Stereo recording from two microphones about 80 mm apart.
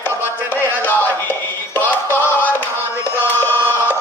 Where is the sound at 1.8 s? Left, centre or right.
Left.